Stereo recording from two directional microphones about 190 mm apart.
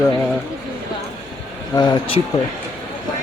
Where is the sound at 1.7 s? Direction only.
25° left (ahead or behind).